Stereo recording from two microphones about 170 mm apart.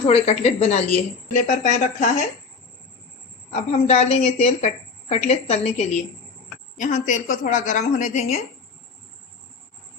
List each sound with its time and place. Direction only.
0.0 s a woman's voice: 35° left (ahead or behind)
1.3 s a woman's voice: 50° left (ahead or behind)
3.5 s a woman's voice: 40° left (ahead or behind)